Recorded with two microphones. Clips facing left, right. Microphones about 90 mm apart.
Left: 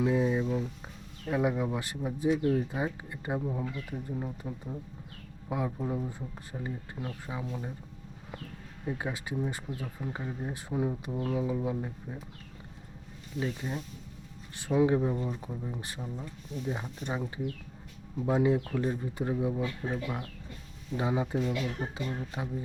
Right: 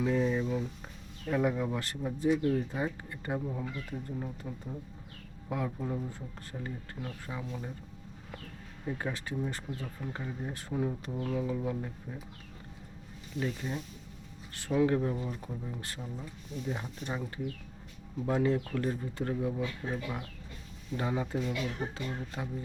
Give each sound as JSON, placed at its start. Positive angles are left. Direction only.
{"t": 0.0, "sound": "a sound", "side_deg": 10}
{"t": 1.3, "sound": "speech", "side_deg": 15}
{"t": 8.9, "sound": "speech", "side_deg": 10}
{"t": 13.4, "sound": "speech", "side_deg": 10}
{"t": 15.1, "sound": "speech", "side_deg": 0}
{"t": 19.2, "sound": "speech", "side_deg": 15}